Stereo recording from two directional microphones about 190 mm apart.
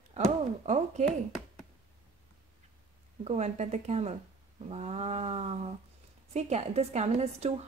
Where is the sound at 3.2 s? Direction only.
35° right (ahead or behind).